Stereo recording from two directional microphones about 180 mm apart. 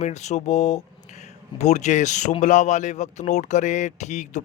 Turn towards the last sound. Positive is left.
turn(degrees=40)  # may be behind; listen again after turning